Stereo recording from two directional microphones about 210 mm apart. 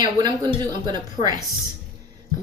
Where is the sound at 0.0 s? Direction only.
20° right (ahead or behind).